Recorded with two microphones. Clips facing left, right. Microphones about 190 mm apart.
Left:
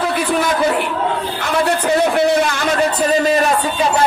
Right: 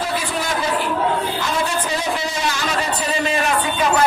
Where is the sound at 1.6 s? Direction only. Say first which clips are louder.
Left 7 dB; 60° left (ahead or behind); by 3.5 s 40° left (ahead or behind).